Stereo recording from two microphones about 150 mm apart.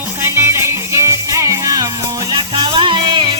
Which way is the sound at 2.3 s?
35° right (ahead or behind).